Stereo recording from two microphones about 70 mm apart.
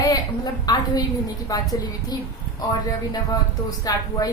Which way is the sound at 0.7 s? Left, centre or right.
Left.